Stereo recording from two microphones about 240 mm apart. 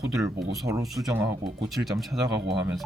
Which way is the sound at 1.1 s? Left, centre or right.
Centre.